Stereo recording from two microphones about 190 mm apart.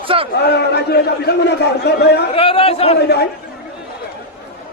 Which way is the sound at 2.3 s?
30° left (ahead or behind).